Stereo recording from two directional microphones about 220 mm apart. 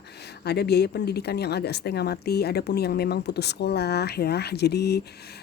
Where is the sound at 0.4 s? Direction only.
50° left (ahead or behind).